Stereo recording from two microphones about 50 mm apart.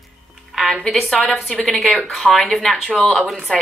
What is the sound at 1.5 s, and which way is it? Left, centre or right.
A woman's voice, centre.